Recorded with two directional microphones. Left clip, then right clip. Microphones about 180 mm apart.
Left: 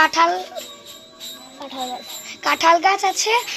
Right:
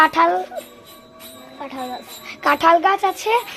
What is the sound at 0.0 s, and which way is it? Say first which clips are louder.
Speech: right 1 dB; 50° right (ahead or behind).